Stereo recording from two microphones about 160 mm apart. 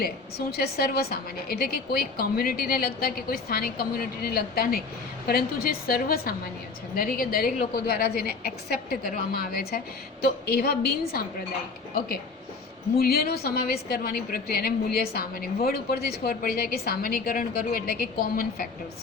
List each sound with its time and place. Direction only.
0.0 s a woman's voice: 75° left (ahead or behind)